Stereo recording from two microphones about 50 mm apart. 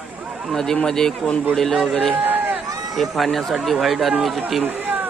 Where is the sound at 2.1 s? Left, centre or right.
Right.